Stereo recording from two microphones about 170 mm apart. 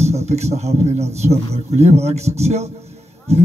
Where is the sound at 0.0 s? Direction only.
40° right (ahead or behind).